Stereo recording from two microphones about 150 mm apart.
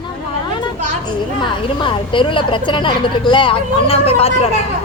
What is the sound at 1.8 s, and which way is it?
A woman's voice, 35° left (ahead or behind).